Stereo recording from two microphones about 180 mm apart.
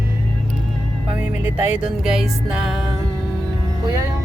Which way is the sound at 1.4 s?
10° right (ahead or behind).